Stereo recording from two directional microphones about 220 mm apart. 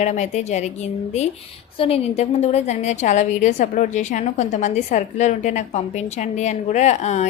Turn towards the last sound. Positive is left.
turn(degrees=30)  # may be behind; listen again after turning